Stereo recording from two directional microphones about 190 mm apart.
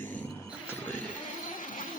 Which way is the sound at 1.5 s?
45° left (ahead or behind).